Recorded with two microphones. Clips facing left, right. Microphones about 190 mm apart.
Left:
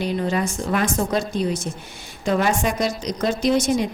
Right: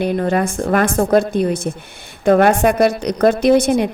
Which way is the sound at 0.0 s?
55° right (ahead or behind).